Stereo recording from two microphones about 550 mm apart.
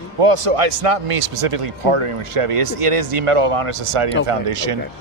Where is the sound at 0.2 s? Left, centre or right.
Right.